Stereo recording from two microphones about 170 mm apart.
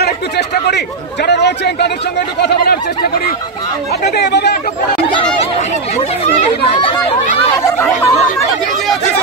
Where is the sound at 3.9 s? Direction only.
75° left (ahead or behind).